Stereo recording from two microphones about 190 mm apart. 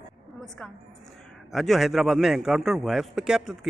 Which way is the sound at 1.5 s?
Centre (ahead or behind).